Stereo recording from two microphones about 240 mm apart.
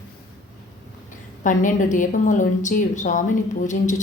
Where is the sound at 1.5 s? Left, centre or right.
Left.